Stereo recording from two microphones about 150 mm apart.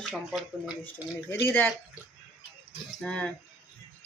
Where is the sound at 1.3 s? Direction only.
15° left (ahead or behind).